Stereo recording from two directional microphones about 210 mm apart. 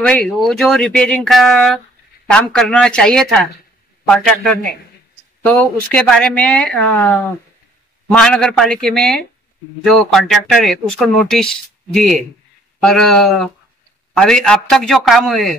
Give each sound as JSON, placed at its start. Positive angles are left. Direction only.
{"t": 0.0, "sound": "speech", "side_deg": 5}